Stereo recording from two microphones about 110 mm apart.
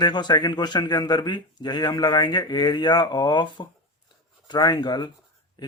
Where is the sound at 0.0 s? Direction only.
40° left (ahead or behind).